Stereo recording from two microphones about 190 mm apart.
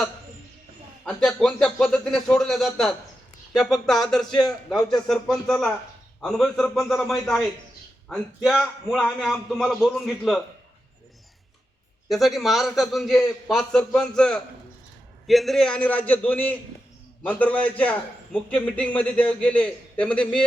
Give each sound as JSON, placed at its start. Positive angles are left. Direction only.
{"t": 1.0, "sound": "a man's voice", "side_deg": 0}
{"t": 12.0, "sound": "a man's voice", "side_deg": 0}